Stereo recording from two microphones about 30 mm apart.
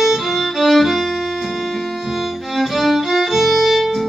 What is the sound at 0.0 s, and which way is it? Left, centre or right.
Music, centre.